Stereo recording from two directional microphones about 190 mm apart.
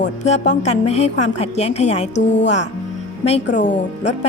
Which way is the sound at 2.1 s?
70° left (ahead or behind).